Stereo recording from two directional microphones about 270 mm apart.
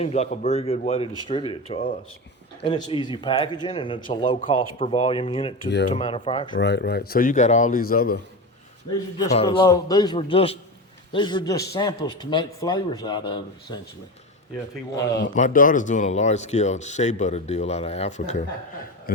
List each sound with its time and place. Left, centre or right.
0.0 s a man's voice: left
5.6 s a man's voice: left
5.9 s speech: left
6.5 s a man's voice: left
9.1 s a man's voice: centre
15.4 s speech: left